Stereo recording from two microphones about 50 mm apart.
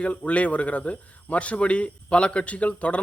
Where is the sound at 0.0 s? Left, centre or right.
Left.